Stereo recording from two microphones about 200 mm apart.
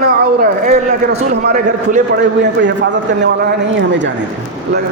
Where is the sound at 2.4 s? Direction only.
60° right (ahead or behind).